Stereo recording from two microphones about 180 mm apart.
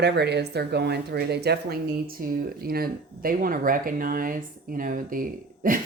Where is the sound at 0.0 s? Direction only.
70° right (ahead or behind).